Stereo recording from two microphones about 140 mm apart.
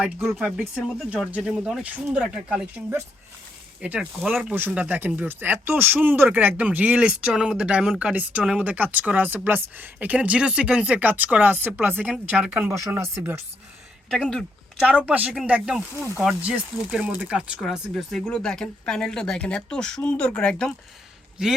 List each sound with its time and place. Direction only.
0.0 s speech: 5° right (ahead or behind)
12.8 s speech: 20° right (ahead or behind)
14.1 s speech: 5° left (ahead or behind)